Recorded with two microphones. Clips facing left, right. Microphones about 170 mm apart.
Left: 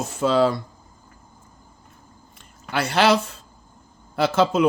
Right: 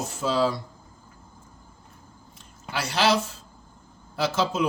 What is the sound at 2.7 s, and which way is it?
Speech, 60° left (ahead or behind).